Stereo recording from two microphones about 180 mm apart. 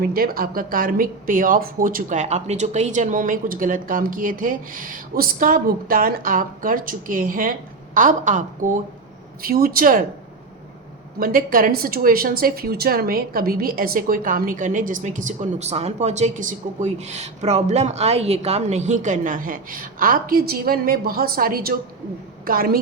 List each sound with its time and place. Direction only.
0.0 s a woman's voice: 55° right (ahead or behind)
11.2 s a woman's voice: 50° right (ahead or behind)